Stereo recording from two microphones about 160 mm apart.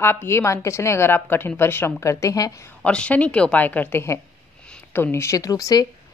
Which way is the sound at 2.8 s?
5° left (ahead or behind).